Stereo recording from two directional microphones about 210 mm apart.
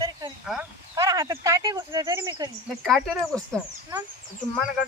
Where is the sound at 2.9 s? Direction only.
Centre (ahead or behind).